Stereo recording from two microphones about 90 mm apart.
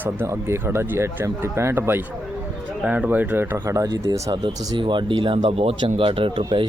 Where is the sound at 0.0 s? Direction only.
25° right (ahead or behind).